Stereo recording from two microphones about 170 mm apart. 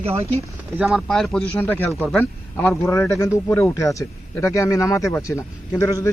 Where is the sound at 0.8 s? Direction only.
5° right (ahead or behind).